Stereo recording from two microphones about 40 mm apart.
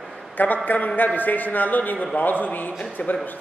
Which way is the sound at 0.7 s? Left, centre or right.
Left.